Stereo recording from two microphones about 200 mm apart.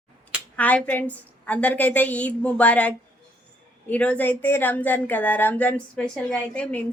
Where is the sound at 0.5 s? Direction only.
5° left (ahead or behind).